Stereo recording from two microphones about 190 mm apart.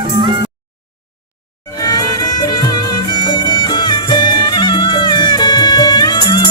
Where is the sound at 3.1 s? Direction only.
25° left (ahead or behind).